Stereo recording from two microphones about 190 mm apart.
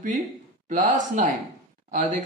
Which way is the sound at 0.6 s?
40° right (ahead or behind).